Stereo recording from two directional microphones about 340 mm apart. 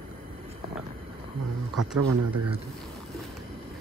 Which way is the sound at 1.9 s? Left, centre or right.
Right.